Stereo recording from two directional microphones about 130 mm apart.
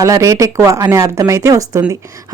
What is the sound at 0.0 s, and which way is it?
A woman's voice, 25° right (ahead or behind).